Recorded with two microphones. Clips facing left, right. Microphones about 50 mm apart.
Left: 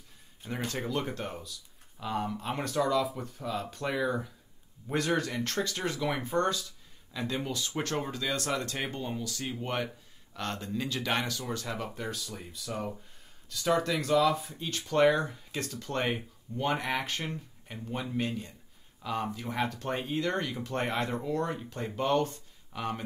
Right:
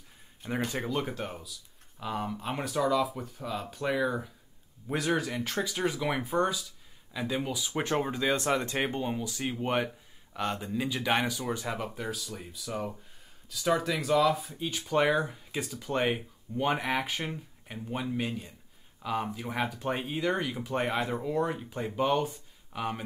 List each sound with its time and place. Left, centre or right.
0.7 s speech: centre